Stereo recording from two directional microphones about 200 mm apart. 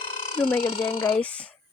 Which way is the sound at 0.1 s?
30° left (ahead or behind).